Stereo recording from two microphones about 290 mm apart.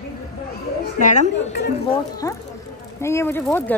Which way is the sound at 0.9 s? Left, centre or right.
Left.